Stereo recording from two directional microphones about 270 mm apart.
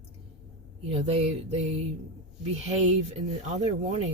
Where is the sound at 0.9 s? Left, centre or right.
Right.